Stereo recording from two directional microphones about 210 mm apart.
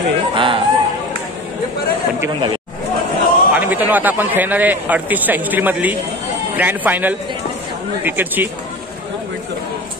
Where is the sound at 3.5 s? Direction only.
10° right (ahead or behind).